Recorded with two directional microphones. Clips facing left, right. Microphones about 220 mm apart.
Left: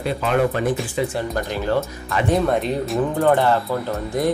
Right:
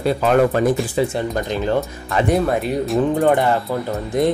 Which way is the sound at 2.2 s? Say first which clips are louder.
Even; 5° right (ahead or behind).